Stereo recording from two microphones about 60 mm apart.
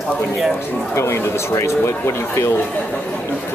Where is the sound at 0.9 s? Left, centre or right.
Left.